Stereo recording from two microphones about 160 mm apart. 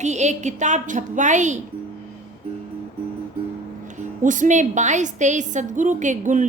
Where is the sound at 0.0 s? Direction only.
45° right (ahead or behind).